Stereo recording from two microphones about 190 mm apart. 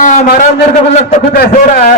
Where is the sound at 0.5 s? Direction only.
60° left (ahead or behind).